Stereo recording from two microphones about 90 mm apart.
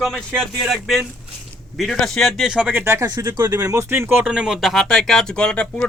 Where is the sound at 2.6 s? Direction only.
25° right (ahead or behind).